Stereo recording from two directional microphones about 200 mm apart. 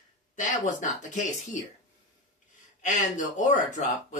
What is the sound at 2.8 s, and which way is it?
Speech, 40° left (ahead or behind).